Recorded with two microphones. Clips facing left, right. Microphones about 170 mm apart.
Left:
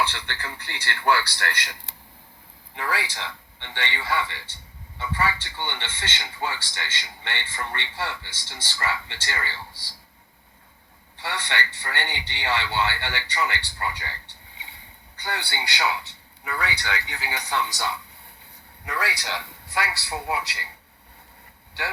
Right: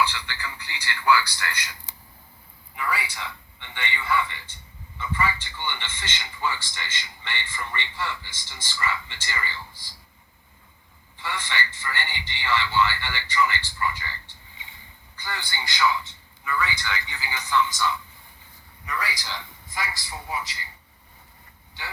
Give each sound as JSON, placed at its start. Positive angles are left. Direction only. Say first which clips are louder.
{"t": 0.1, "sound": "a man's voice", "louder": "left 1 dB", "side_deg": 55}
{"t": 2.7, "sound": "a man's voice", "louder": "left 1 dB", "side_deg": 90}
{"t": 11.2, "sound": "a man's voice", "louder": "left 1 dB", "side_deg": 70}
{"t": 21.8, "sound": "a man's voice", "louder": "left 7 dB", "side_deg": 70}